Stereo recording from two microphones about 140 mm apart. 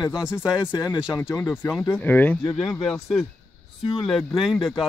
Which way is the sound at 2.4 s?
40° left (ahead or behind).